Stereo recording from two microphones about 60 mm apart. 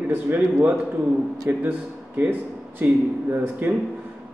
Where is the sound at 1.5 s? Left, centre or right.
Right.